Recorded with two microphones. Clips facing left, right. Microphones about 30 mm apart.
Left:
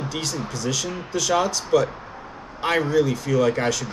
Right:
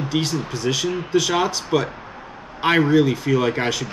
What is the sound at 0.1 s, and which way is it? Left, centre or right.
Speech, right.